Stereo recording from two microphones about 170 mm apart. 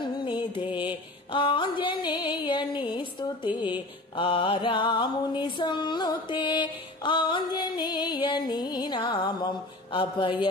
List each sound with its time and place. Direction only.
0.0 s mantra: 30° left (ahead or behind)
4.2 s music: 30° left (ahead or behind)